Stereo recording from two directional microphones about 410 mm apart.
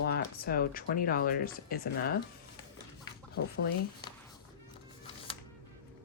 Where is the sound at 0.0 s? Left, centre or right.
Left.